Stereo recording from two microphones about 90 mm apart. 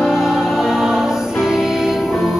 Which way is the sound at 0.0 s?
5° right (ahead or behind).